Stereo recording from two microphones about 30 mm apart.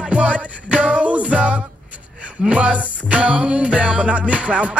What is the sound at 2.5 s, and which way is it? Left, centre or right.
Music, right.